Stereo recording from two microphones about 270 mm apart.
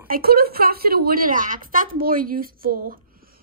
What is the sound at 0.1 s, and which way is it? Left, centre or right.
A woman's voice, right.